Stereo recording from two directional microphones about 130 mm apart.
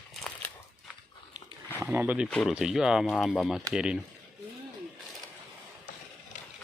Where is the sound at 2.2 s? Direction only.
5° left (ahead or behind).